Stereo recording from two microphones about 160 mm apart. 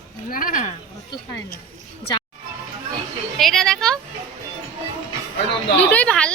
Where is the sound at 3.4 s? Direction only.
Centre (ahead or behind).